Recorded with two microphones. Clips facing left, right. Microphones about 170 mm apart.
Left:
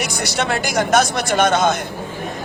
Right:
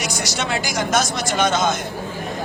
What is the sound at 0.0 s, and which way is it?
Speech, 60° left (ahead or behind).